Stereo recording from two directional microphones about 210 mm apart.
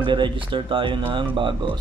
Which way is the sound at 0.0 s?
20° right (ahead or behind).